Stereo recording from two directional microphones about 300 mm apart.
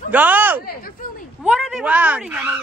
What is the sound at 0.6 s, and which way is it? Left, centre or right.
Speech, left.